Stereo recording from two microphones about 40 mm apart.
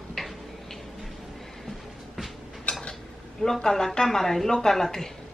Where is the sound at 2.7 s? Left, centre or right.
Left.